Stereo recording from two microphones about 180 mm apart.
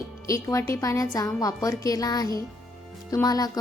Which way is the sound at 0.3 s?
15° left (ahead or behind).